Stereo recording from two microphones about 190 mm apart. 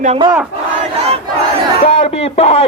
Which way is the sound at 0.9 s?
30° right (ahead or behind).